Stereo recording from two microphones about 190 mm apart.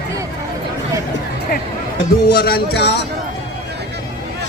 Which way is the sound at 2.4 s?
60° left (ahead or behind).